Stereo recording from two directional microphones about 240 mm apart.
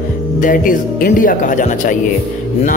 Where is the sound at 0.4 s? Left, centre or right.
Left.